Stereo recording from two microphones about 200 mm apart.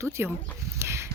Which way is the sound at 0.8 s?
15° right (ahead or behind).